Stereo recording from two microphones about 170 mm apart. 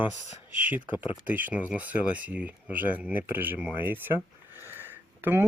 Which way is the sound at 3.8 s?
10° right (ahead or behind).